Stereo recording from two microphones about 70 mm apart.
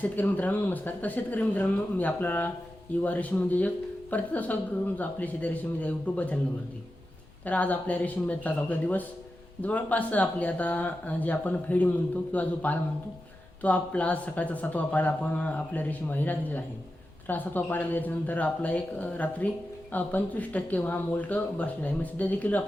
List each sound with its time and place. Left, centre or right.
0.2 s speech: left
7.4 s speech: left